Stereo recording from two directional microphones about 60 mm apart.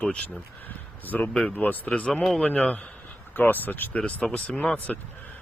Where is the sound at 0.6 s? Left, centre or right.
Left.